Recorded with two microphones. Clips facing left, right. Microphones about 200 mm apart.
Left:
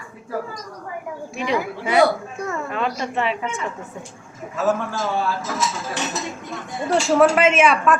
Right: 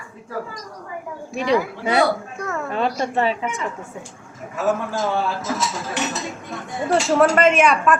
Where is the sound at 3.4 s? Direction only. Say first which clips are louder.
Right 1 dB; 15° right (ahead or behind).